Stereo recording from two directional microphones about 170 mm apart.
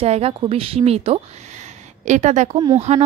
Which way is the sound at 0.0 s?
35° right (ahead or behind).